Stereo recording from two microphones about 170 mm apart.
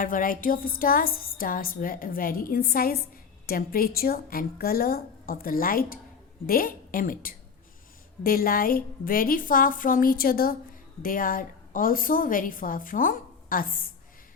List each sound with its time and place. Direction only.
0.0 s a woman's voice: 55° left (ahead or behind)